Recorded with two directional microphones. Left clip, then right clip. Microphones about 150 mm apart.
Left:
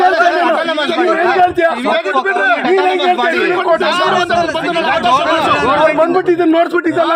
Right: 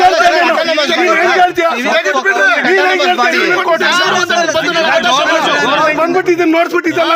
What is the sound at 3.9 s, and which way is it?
Speech, 25° right (ahead or behind).